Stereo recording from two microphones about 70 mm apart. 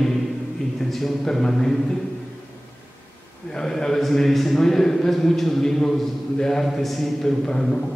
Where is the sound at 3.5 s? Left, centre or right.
Centre.